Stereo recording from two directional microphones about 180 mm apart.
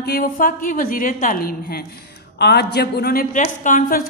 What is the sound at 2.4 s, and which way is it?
Speech, 65° left (ahead or behind).